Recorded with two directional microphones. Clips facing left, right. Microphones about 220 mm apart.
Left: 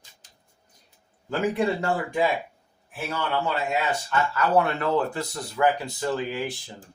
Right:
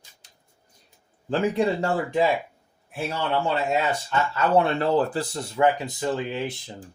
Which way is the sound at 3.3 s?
25° right (ahead or behind).